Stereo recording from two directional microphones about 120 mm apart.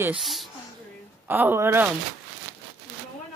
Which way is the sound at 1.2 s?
15° right (ahead or behind).